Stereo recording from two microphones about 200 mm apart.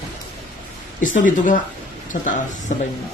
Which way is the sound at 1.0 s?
40° left (ahead or behind).